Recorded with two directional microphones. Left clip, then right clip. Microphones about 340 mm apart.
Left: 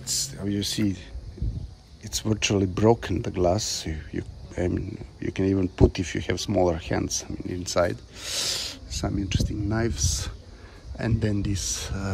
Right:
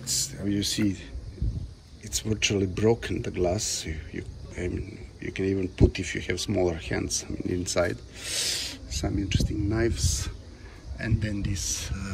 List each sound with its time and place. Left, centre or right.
0.0 s speech: centre
2.0 s speech: centre
3.9 s speech: left
5.8 s speech: centre